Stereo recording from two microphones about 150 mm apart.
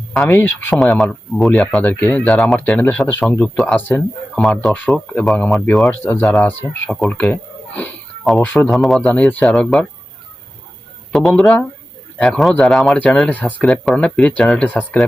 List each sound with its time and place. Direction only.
0.3 s speech: 15° left (ahead or behind)
0.9 s speech: 5° left (ahead or behind)
4.9 s speech: centre (ahead or behind)
5.9 s speech: 15° left (ahead or behind)
8.7 s speech: centre (ahead or behind)
11.1 s speech: centre (ahead or behind)